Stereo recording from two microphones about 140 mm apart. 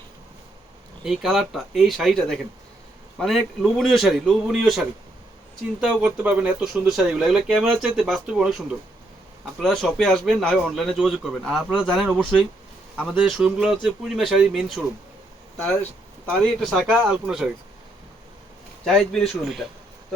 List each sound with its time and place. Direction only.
1.0 s speech: 5° right (ahead or behind)
15.6 s speech: 10° left (ahead or behind)
18.9 s speech: 5° left (ahead or behind)